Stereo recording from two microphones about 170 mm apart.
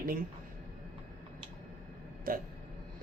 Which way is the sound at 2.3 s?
60° right (ahead or behind).